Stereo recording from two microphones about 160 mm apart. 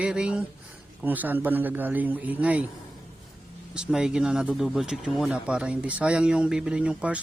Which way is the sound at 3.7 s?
5° right (ahead or behind).